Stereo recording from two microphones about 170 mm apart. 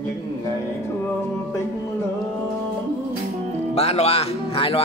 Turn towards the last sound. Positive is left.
turn(degrees=35)  # may be behind; listen again after turning